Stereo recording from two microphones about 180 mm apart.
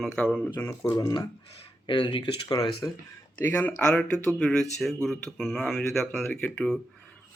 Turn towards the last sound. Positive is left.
turn(degrees=5)  # may be behind; listen again after turning